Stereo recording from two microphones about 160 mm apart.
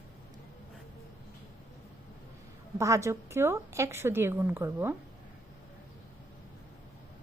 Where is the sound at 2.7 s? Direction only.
20° right (ahead or behind).